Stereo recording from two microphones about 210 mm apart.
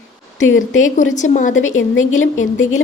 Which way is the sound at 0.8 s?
35° left (ahead or behind).